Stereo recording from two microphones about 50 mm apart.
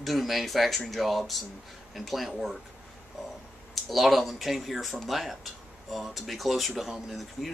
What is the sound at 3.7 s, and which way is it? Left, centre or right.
Speech, centre.